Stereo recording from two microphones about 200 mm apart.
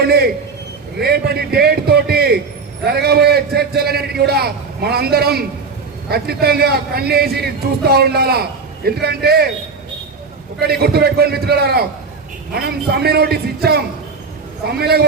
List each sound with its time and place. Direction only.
0.0 s a man's voice: 50° right (ahead or behind)
10.6 s a man's voice: 50° right (ahead or behind)